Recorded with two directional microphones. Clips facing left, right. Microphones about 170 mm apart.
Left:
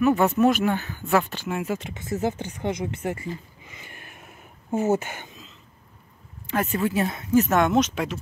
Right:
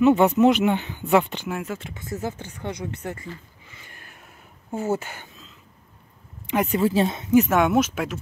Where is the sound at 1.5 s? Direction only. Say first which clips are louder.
Left 2 dB; 5° left (ahead or behind).